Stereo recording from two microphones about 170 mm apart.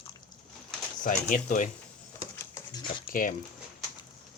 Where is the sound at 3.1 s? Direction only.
55° left (ahead or behind).